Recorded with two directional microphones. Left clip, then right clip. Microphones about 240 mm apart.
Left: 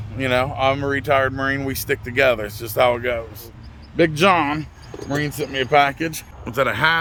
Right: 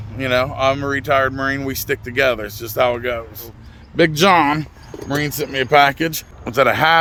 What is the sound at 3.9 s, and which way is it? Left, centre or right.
Speech, centre.